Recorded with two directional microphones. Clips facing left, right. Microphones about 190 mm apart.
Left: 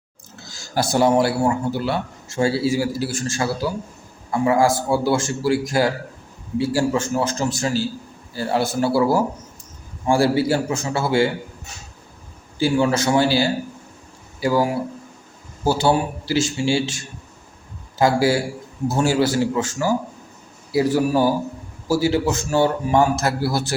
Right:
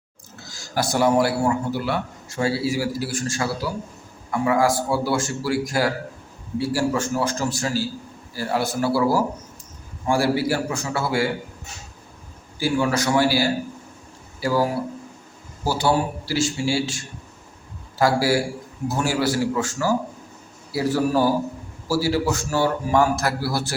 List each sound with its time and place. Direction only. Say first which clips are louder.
0.4 s a man's voice: left 2 dB; 25° left (ahead or behind)
12.5 s a man's voice: left 3 dB; 25° left (ahead or behind)
15.6 s a man's voice: left 3 dB; 25° left (ahead or behind)